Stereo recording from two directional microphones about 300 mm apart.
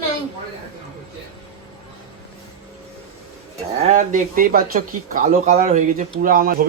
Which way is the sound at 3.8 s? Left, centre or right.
Right.